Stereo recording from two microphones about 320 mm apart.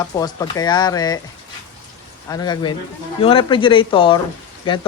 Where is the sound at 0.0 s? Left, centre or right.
Centre.